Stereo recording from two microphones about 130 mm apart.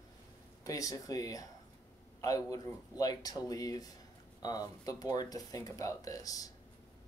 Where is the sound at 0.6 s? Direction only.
25° left (ahead or behind).